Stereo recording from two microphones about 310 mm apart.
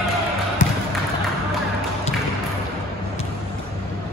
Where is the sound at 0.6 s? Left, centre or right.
Left.